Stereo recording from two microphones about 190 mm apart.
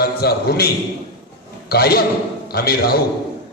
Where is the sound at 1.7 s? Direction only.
55° left (ahead or behind).